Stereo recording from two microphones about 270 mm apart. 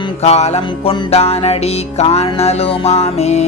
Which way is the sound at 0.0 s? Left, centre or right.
Left.